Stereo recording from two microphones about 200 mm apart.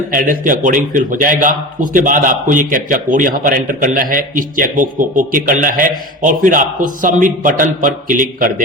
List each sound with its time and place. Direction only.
0.1 s a man's voice: 45° right (ahead or behind)